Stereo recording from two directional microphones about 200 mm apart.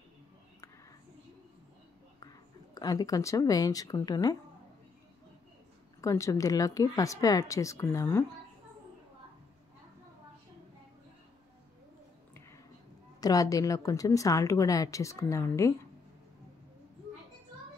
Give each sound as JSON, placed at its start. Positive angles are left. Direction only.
{"t": 2.7, "sound": "speech", "side_deg": 20}
{"t": 5.9, "sound": "speech", "side_deg": 15}
{"t": 13.2, "sound": "speech", "side_deg": 15}